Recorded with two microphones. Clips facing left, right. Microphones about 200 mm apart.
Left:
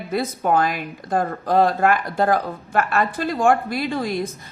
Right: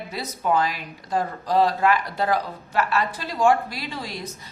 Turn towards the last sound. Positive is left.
turn(degrees=55)  # may be behind; listen again after turning